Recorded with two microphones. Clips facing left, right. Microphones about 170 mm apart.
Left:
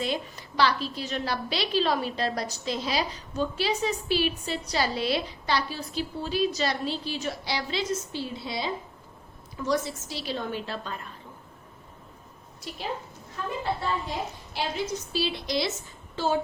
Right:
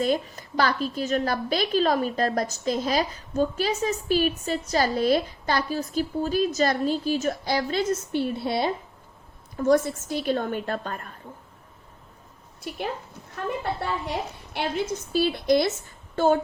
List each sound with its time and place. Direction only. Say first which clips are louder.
0.0 s a woman's voice: right 6 dB; 45° right (ahead or behind)
12.7 s a woman's voice: right 3 dB; 55° right (ahead or behind)